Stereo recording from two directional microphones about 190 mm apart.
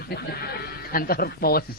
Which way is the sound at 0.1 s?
55° left (ahead or behind).